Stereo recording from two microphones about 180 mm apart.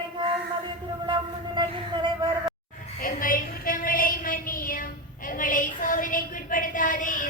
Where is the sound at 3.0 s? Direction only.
50° left (ahead or behind).